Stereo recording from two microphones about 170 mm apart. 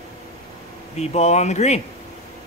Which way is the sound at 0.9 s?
40° left (ahead or behind).